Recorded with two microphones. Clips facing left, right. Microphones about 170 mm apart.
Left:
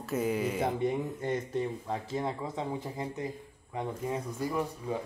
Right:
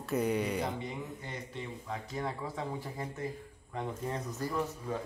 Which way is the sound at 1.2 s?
45° left (ahead or behind).